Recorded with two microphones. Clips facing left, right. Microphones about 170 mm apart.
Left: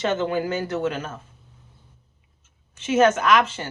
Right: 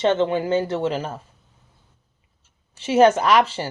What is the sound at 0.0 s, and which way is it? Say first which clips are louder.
Speech: right 4 dB; 30° right (ahead or behind).